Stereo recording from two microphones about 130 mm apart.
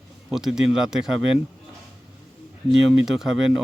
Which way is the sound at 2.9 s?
5° right (ahead or behind).